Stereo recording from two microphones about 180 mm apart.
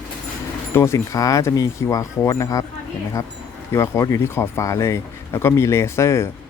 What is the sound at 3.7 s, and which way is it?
Speech, 15° left (ahead or behind).